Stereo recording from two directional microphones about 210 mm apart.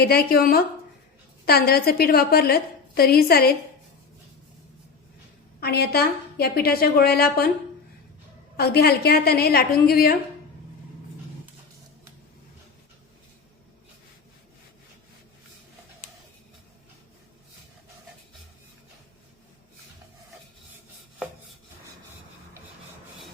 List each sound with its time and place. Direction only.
0.0 s a woman's voice: 45° left (ahead or behind)
5.5 s a woman's voice: 50° left (ahead or behind)
8.5 s a woman's voice: 50° left (ahead or behind)